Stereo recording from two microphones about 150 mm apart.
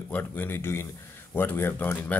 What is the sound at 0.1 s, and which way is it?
Speech, 10° left (ahead or behind).